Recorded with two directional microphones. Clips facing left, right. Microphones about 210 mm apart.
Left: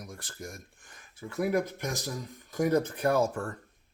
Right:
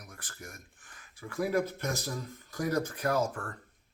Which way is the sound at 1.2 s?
20° left (ahead or behind).